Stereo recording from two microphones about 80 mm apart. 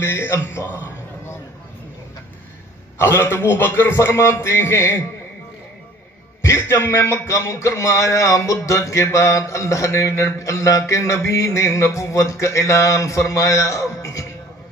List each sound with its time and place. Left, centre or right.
0.0 s speech: left
3.0 s speech: left
6.4 s speech: left